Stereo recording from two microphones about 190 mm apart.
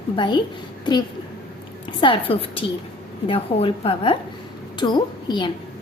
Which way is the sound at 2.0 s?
25° left (ahead or behind).